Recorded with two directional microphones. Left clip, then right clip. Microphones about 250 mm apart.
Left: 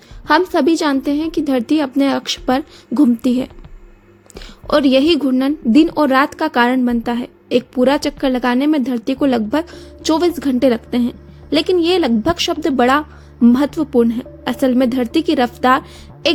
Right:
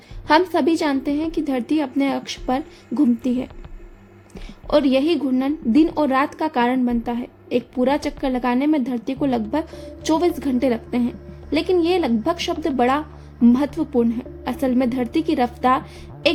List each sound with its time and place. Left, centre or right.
0.3 s a woman's voice: centre